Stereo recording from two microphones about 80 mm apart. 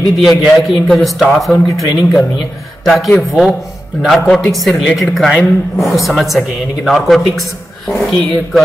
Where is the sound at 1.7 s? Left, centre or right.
Left.